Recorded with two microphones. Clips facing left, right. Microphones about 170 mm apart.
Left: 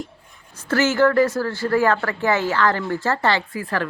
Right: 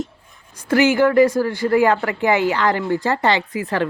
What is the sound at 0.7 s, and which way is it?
Speech, 15° right (ahead or behind).